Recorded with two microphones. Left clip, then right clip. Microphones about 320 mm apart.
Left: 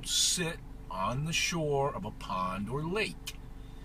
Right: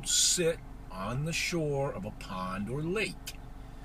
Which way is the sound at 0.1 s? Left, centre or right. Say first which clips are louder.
Right 2 dB; centre.